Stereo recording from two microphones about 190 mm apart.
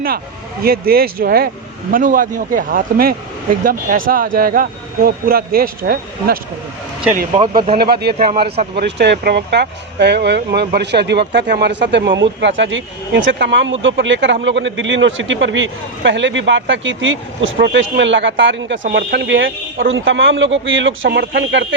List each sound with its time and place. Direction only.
0.6 s speech: 50° right (ahead or behind)
7.3 s speech: 25° right (ahead or behind)
7.8 s a man's voice: 55° right (ahead or behind); by 18.8 s 75° right (ahead or behind)
18.8 s a man's voice: 55° right (ahead or behind); by 21.8 s 70° right (ahead or behind)